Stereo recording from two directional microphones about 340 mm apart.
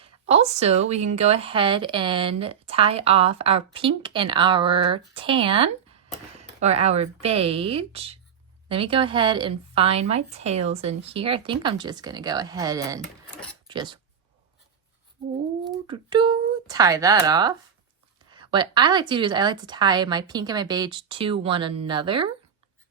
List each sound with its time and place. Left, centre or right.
0.0 s speech: centre
15.6 s speech: centre